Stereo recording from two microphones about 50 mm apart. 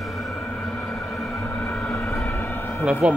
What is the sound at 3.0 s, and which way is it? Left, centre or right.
Speech, right.